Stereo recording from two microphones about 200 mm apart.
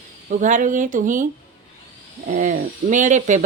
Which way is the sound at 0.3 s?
40° right (ahead or behind).